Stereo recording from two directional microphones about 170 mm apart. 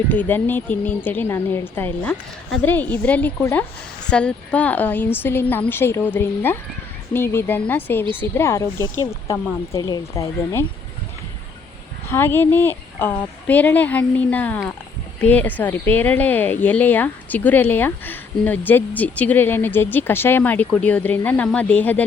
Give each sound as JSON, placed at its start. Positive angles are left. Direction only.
{"t": 0.1, "sound": "a woman's voice", "side_deg": 10}
{"t": 12.0, "sound": "a woman's voice", "side_deg": 15}